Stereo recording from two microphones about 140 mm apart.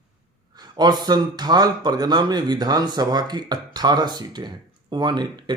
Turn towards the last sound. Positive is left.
turn(degrees=-30)  # may be behind; listen again after turning